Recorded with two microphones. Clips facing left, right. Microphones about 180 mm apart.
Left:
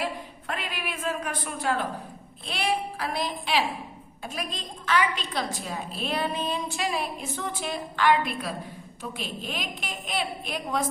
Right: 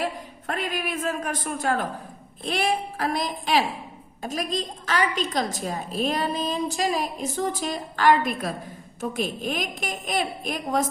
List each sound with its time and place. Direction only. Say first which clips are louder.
0.0 s a woman's voice: right 2 dB; 45° right (ahead or behind)